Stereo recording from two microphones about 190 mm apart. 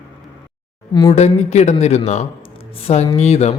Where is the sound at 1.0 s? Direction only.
30° left (ahead or behind).